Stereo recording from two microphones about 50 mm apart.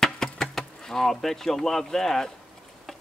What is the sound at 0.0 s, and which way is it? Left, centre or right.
Speech, centre.